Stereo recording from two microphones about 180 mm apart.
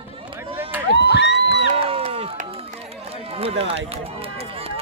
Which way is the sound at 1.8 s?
30° right (ahead or behind).